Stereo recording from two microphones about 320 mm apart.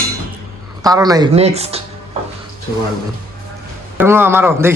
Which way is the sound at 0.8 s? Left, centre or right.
Centre.